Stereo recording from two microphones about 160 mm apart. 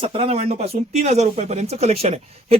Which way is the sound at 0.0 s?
35° right (ahead or behind).